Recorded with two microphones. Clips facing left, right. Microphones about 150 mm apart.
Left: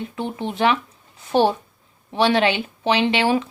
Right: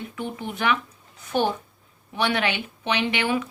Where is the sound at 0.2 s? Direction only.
25° left (ahead or behind).